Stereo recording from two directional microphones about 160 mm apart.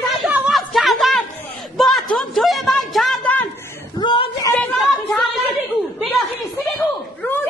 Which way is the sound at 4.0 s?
30° left (ahead or behind).